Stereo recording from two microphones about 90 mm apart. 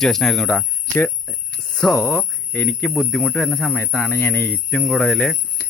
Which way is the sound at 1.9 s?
25° left (ahead or behind).